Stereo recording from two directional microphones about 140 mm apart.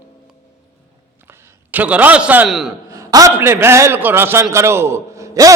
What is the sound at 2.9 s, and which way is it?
A man's voice, 25° right (ahead or behind).